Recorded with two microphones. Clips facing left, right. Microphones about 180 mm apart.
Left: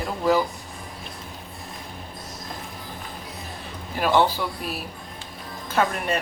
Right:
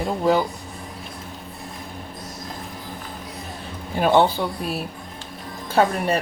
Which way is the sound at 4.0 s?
25° right (ahead or behind).